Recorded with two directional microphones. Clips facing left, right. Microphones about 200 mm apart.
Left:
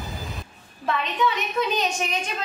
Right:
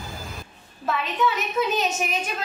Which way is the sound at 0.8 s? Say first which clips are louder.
Even; 5° right (ahead or behind).